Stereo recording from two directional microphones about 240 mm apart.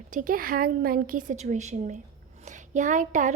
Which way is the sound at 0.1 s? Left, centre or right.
Right.